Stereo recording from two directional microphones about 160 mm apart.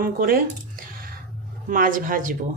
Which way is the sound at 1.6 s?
55° right (ahead or behind).